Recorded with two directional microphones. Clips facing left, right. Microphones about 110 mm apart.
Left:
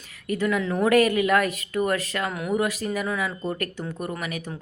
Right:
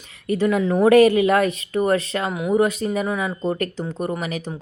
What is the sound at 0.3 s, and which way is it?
Speech, 25° right (ahead or behind).